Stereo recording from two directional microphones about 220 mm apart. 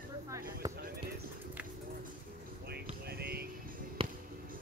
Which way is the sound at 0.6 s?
15° right (ahead or behind).